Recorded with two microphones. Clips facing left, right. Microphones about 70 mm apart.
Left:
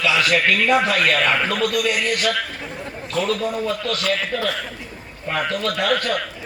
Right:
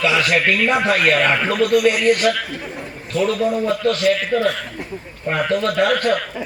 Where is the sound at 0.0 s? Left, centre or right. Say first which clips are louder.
Right 1 dB; right.